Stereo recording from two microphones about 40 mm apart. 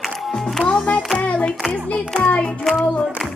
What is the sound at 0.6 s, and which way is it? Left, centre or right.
Music, right.